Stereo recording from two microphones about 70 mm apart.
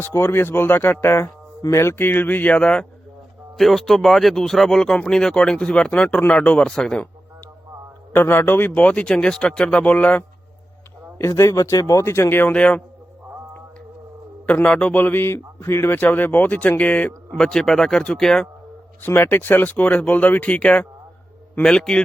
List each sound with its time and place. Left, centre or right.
0.0 s speech: left
2.0 s speech: left
2.6 s speech: centre
3.6 s speech: centre
8.1 s speech: left
11.2 s speech: left
12.0 s speech: left
12.5 s speech: centre
14.4 s speech: centre
14.9 s speech: left
17.3 s speech: centre
19.0 s speech: left; by 22.0 s centre